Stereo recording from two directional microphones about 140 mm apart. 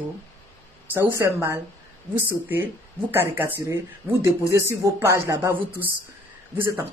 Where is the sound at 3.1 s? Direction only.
15° right (ahead or behind).